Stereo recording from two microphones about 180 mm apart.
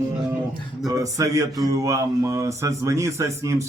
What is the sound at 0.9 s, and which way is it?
Speech, 20° right (ahead or behind).